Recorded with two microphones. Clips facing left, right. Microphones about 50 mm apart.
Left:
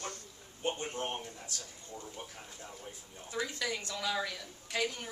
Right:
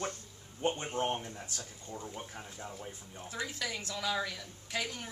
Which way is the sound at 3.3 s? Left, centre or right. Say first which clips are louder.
Left 2 dB; centre.